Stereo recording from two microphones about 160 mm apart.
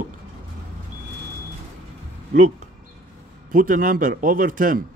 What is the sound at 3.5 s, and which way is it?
A man's voice, 55° right (ahead or behind).